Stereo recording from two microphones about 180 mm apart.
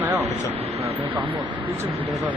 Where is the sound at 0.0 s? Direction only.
15° right (ahead or behind).